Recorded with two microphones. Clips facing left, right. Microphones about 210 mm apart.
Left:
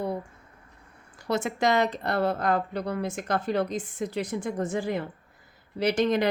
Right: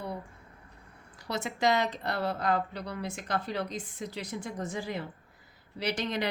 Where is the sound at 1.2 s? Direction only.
50° left (ahead or behind).